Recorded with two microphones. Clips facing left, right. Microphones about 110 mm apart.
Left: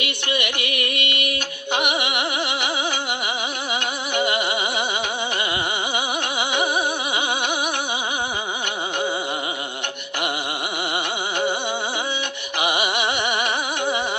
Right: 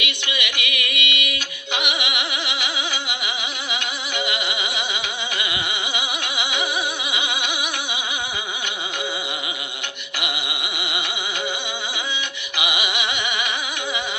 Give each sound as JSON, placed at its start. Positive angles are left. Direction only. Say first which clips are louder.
{"t": 0.0, "sound": "music", "louder": "left 3 dB", "side_deg": 45}
{"t": 3.7, "sound": "music", "louder": "left 3 dB", "side_deg": 45}
{"t": 7.1, "sound": "a sound", "louder": "left 3 dB", "side_deg": 45}
{"t": 10.2, "sound": "music", "louder": "left 4 dB", "side_deg": 45}
{"t": 12.5, "sound": "music", "louder": "left 4 dB", "side_deg": 45}